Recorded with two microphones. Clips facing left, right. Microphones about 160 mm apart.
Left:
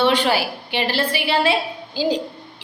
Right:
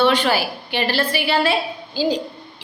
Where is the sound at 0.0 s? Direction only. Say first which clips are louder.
Right 1 dB; 25° left (ahead or behind).